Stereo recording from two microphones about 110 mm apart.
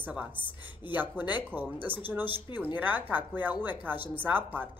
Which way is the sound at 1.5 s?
15° right (ahead or behind).